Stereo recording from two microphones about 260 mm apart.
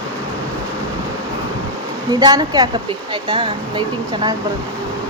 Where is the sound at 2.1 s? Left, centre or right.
Centre.